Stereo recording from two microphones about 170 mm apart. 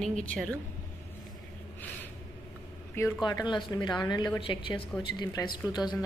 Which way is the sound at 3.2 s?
25° left (ahead or behind).